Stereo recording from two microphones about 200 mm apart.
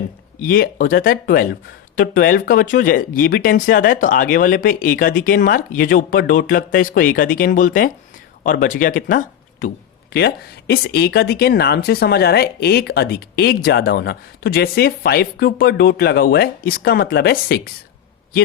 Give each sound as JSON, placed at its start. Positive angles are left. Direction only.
{"t": 0.3, "sound": "speech", "side_deg": 45}